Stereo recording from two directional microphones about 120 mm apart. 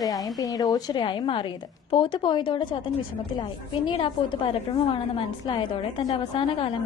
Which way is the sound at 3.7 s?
45° left (ahead or behind).